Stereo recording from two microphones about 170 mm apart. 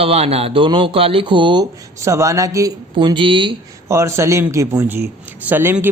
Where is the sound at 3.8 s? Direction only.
15° right (ahead or behind).